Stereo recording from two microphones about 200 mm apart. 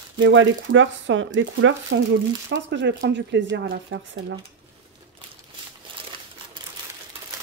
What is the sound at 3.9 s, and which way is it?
Speech, 70° right (ahead or behind).